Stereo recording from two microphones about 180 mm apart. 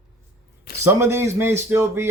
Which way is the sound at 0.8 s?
15° right (ahead or behind).